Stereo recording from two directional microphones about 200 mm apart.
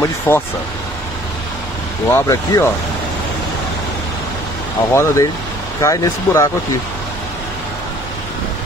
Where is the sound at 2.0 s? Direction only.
15° left (ahead or behind).